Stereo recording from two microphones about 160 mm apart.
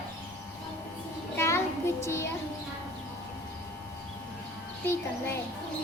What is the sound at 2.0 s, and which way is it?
Speech, 15° left (ahead or behind).